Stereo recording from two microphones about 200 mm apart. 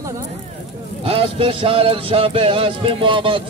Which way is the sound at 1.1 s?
25° right (ahead or behind).